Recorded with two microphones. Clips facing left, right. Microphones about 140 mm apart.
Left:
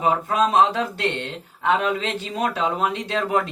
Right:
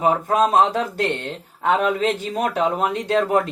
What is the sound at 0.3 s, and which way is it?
A woman's voice, 45° right (ahead or behind).